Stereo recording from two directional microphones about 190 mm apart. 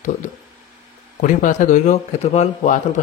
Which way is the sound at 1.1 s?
45° left (ahead or behind).